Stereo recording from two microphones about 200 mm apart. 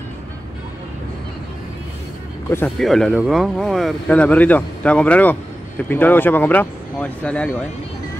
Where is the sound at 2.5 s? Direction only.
10° left (ahead or behind).